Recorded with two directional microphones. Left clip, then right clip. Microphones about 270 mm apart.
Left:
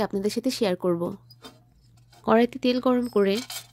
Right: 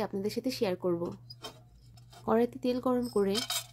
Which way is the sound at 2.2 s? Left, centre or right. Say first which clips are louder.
Left 7 dB; centre.